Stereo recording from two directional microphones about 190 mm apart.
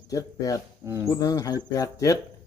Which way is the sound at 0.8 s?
15° right (ahead or behind).